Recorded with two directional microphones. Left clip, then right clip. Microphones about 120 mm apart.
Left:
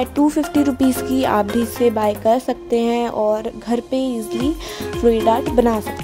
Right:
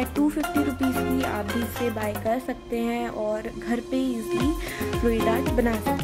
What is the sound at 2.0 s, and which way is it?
Speech, 50° left (ahead or behind).